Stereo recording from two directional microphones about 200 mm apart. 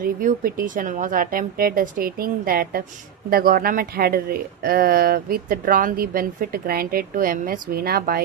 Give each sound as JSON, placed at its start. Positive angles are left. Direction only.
{"t": 0.0, "sound": "speech", "side_deg": -45}